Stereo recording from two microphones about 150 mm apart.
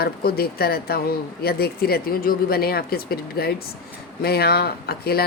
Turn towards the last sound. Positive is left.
turn(degrees=90)